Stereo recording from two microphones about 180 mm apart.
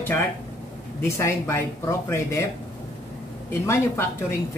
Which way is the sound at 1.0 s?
15° left (ahead or behind).